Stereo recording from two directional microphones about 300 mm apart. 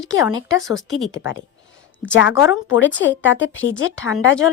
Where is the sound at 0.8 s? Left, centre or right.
Centre.